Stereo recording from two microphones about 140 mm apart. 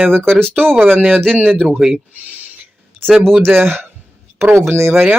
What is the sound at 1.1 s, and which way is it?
Speech, 5° left (ahead or behind).